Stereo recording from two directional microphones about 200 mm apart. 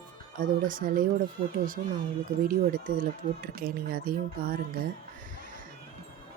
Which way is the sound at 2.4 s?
45° right (ahead or behind).